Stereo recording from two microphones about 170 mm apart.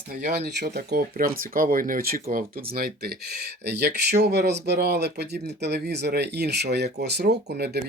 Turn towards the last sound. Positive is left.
turn(degrees=-70)  # may be behind; listen again after turning